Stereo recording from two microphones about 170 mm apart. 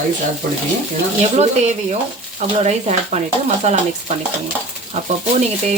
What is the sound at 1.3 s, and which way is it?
Sizzle, 40° right (ahead or behind).